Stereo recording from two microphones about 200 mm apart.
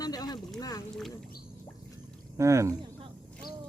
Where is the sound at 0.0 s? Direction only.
20° left (ahead or behind).